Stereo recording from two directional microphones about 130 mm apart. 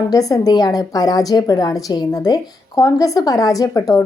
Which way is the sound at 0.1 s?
25° left (ahead or behind).